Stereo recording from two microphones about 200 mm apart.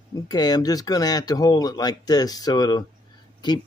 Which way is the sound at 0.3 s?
20° left (ahead or behind).